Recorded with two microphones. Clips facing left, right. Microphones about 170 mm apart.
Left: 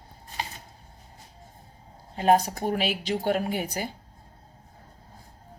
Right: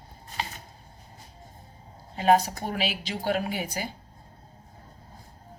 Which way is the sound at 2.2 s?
50° left (ahead or behind).